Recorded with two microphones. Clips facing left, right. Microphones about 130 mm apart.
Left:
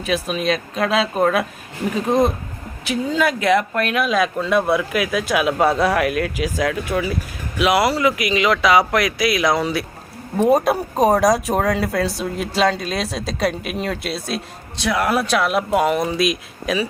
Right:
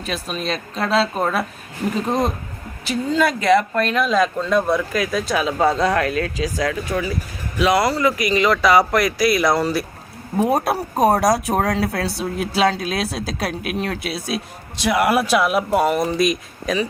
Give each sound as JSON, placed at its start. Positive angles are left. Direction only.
{"t": 0.0, "sound": "speech", "side_deg": 5}